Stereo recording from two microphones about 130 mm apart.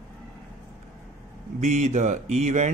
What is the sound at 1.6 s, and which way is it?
Speech, 65° right (ahead or behind).